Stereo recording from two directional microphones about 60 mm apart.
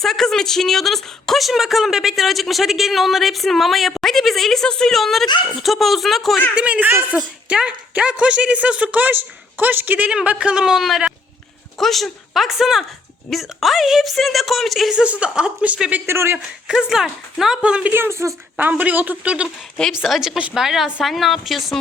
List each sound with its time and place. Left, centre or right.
0.0 s speech: centre
6.6 s speech: right
10.2 s speech: centre
11.8 s speech: centre
14.9 s speech: centre
16.0 s a woman's voice: right
16.6 s speech: centre
17.9 s a woman's voice: right
18.5 s speech: right
19.9 s speech: centre